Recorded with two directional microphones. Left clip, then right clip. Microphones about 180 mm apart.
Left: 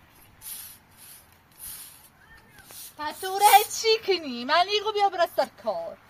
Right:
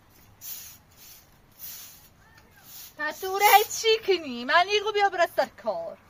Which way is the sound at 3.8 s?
Centre (ahead or behind).